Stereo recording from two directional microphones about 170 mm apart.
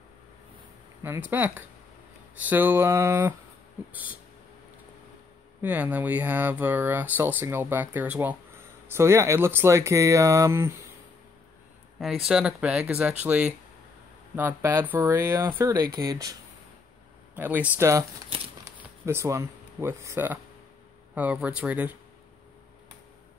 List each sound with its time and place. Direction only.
1.0 s speech: 10° right (ahead or behind)
5.6 s speech: 10° right (ahead or behind)
12.3 s speech: 5° right (ahead or behind); by 16.3 s 25° right (ahead or behind)
17.4 s speech: 10° right (ahead or behind)